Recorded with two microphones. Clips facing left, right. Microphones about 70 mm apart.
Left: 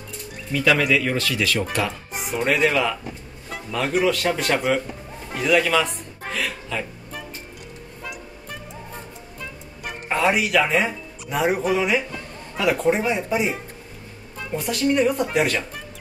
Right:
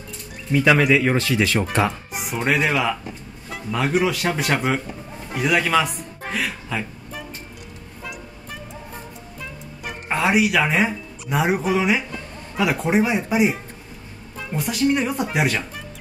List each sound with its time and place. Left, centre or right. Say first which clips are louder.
0.5 s speech: right 3 dB; right
2.1 s speech: left 1 dB; centre
5.3 s music: even; centre
10.0 s speech: right 2 dB; centre